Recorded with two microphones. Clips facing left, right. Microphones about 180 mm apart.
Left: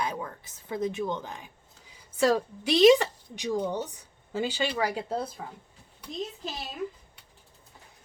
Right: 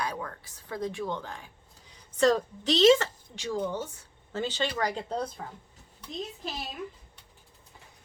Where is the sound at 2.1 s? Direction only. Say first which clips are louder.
Even; 10° left (ahead or behind).